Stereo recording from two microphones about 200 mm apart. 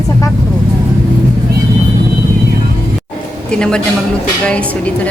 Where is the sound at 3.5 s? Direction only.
5° left (ahead or behind).